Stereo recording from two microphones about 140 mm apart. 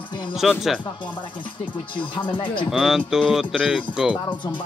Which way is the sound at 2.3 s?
35° left (ahead or behind).